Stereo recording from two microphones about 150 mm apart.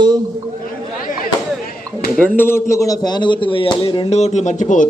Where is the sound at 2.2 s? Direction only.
10° left (ahead or behind); by 4.9 s 55° left (ahead or behind).